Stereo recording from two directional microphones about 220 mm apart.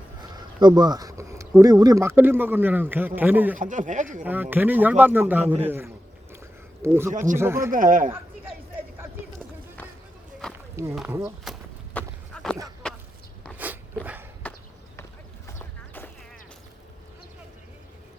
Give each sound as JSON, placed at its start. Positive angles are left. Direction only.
{"t": 0.3, "sound": "speech", "side_deg": -20}
{"t": 3.6, "sound": "speech", "side_deg": -35}
{"t": 4.2, "sound": "speech", "side_deg": -10}
{"t": 7.1, "sound": "speech", "side_deg": -35}
{"t": 7.3, "sound": "speech", "side_deg": -10}
{"t": 7.7, "sound": "speech", "side_deg": -35}
{"t": 10.4, "sound": "walk", "side_deg": 5}
{"t": 10.9, "sound": "speech", "side_deg": -5}
{"t": 11.5, "sound": "a sound", "side_deg": 0}
{"t": 13.6, "sound": "dog", "side_deg": -5}
{"t": 15.4, "sound": "a sound", "side_deg": 10}